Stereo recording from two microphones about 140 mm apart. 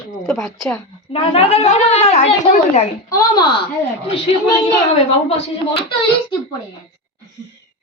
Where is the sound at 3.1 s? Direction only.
30° left (ahead or behind).